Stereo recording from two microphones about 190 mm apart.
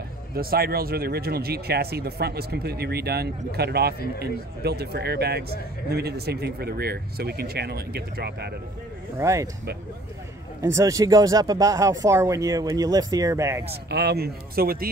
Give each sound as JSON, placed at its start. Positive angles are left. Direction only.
{"t": 0.4, "sound": "speech", "side_deg": -55}
{"t": 9.2, "sound": "speech", "side_deg": -15}
{"t": 10.6, "sound": "speech", "side_deg": -15}
{"t": 13.8, "sound": "speech", "side_deg": -60}